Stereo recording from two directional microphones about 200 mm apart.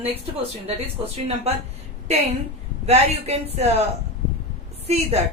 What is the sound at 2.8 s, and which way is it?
A woman's voice, 30° right (ahead or behind).